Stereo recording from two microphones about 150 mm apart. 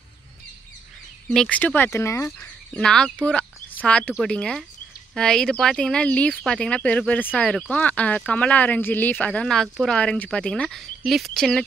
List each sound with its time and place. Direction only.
1.3 s speech: 5° left (ahead or behind)
2.7 s speech: 5° left (ahead or behind)